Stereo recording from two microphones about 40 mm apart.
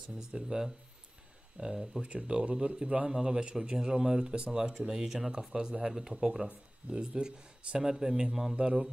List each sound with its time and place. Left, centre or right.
0.3 s speech: centre
8.5 s speech: right